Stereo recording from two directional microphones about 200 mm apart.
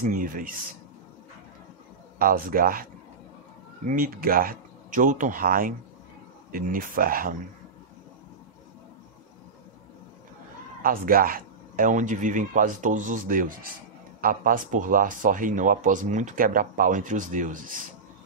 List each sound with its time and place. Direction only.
0.0 s speech: 45° right (ahead or behind)
2.1 s speech: 45° right (ahead or behind)
3.9 s speech: 45° right (ahead or behind)
10.8 s speech: 45° right (ahead or behind)